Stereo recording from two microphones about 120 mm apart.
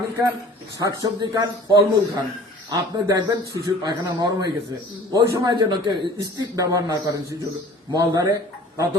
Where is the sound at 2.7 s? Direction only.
30° right (ahead or behind).